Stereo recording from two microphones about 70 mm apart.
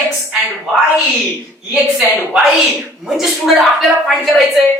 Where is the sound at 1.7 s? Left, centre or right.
Centre.